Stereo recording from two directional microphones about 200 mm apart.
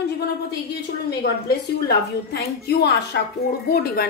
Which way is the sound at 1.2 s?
50° left (ahead or behind).